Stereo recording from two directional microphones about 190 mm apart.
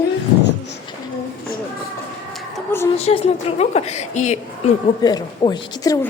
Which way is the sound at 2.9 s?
30° left (ahead or behind).